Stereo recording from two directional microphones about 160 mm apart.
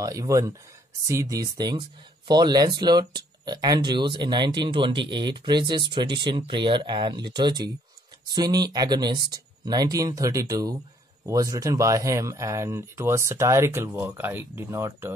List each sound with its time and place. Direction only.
0.0 s speech: 20° right (ahead or behind)